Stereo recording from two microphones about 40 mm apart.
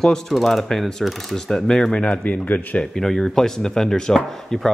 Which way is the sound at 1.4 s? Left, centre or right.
Centre.